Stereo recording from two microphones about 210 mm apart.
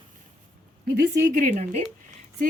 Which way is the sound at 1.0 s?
55° right (ahead or behind).